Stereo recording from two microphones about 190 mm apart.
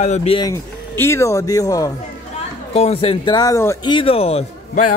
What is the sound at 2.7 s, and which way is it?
Speech, 30° left (ahead or behind).